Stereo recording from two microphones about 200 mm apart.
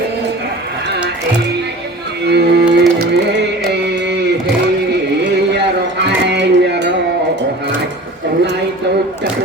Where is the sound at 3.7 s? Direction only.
60° right (ahead or behind).